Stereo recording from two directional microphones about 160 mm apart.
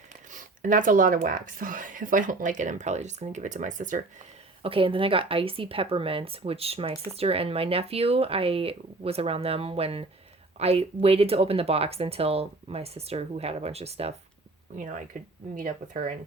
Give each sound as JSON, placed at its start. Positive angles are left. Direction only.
{"t": 0.3, "sound": "speech", "side_deg": -55}
{"t": 4.6, "sound": "speech", "side_deg": -35}
{"t": 15.5, "sound": "speech", "side_deg": -55}